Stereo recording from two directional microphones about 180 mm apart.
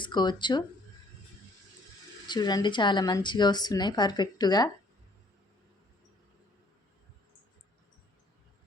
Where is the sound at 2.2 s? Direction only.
25° left (ahead or behind).